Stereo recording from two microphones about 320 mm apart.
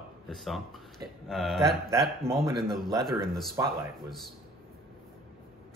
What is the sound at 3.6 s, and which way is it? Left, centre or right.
Speech, centre.